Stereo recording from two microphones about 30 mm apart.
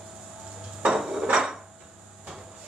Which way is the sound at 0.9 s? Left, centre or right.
Right.